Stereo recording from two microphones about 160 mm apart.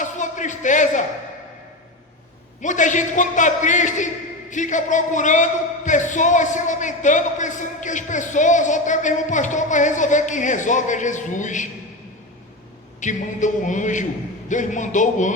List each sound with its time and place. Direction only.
0.0 s a sound: 50° left (ahead or behind)
2.6 s speech: 50° left (ahead or behind)
13.0 s speech: 50° left (ahead or behind)